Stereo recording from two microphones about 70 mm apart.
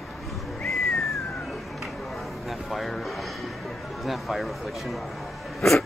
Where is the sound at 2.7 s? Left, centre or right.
Centre.